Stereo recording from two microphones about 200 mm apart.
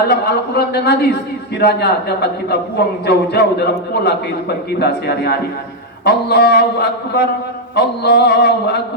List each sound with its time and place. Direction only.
0.1 s a man's voice: 55° left (ahead or behind)